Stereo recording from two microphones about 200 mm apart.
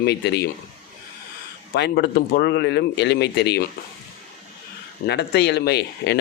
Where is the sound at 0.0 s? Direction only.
55° left (ahead or behind).